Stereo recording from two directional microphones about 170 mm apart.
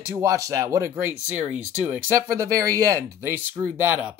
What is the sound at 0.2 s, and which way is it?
Speech, 20° right (ahead or behind).